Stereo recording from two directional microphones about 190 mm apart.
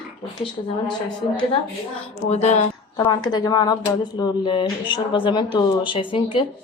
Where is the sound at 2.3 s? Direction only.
35° left (ahead or behind).